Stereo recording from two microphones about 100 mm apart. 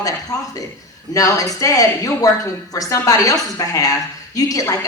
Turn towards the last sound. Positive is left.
turn(degrees=35)  # may be behind; listen again after turning